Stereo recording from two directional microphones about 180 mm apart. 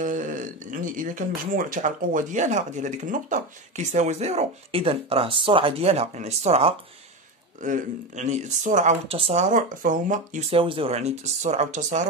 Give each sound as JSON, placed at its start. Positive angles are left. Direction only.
{"t": 0.0, "sound": "speech", "side_deg": -45}
{"t": 10.5, "sound": "speech", "side_deg": -30}